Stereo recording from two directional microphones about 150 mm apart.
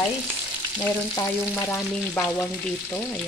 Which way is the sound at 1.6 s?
15° left (ahead or behind).